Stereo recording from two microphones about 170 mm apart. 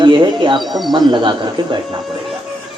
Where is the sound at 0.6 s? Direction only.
Centre (ahead or behind).